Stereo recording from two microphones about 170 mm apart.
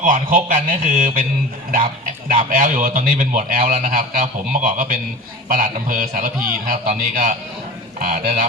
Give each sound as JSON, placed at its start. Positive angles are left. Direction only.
{"t": 0.0, "sound": "a man's voice", "side_deg": -50}
{"t": 2.3, "sound": "a man's voice", "side_deg": -55}